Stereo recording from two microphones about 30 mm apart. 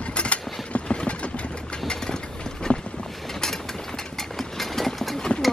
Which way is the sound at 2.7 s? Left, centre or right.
Left.